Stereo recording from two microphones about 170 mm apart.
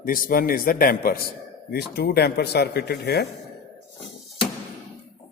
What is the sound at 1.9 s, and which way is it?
Speech, 70° left (ahead or behind).